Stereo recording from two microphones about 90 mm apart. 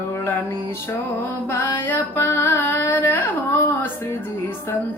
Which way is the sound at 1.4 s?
25° left (ahead or behind).